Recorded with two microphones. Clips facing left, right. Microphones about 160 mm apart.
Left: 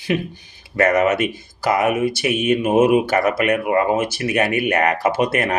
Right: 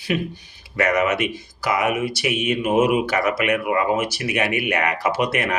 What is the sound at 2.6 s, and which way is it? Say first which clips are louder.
Speech: left 3 dB; 25° left (ahead or behind).